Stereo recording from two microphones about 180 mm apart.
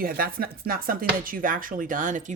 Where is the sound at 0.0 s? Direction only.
55° right (ahead or behind).